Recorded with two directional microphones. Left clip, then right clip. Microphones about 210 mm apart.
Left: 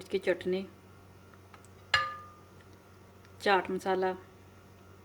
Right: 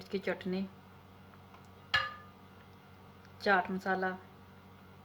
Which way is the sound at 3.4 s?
60° left (ahead or behind).